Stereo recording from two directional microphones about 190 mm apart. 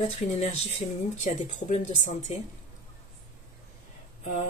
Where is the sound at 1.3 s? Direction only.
40° left (ahead or behind).